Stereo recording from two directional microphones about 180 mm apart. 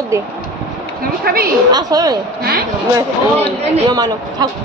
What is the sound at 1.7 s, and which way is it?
Speech, 20° right (ahead or behind).